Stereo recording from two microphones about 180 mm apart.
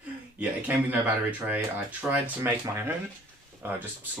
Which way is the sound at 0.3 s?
10° right (ahead or behind).